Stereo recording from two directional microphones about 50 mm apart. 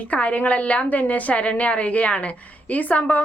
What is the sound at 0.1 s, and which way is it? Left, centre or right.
A woman's voice, left.